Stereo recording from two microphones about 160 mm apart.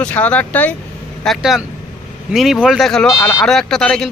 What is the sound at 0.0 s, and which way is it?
Speech, 10° left (ahead or behind).